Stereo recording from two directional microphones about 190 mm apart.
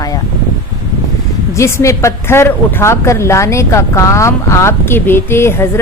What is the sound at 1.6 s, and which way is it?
A woman's voice, 15° left (ahead or behind).